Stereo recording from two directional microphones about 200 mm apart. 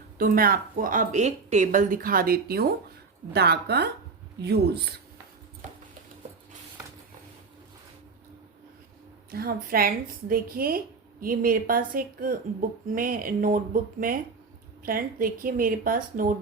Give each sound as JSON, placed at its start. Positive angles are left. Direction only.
{"t": 0.2, "sound": "a woman's voice", "side_deg": -45}
{"t": 5.6, "sound": "clip-clop", "side_deg": -35}
{"t": 9.3, "sound": "a woman's voice", "side_deg": -50}
{"t": 14.8, "sound": "a woman's voice", "side_deg": -45}